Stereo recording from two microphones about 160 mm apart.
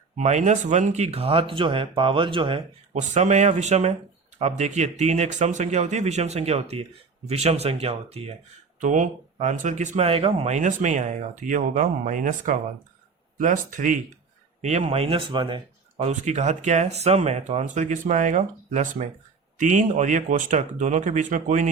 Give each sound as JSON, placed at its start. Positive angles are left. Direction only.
{"t": 0.2, "sound": "speech", "side_deg": -45}
{"t": 2.9, "sound": "speech", "side_deg": -45}
{"t": 8.8, "sound": "speech", "side_deg": -50}
{"t": 14.6, "sound": "speech", "side_deg": -45}
{"t": 16.0, "sound": "speech", "side_deg": -45}